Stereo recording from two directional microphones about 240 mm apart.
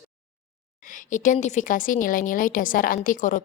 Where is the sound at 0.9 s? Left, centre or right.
Left.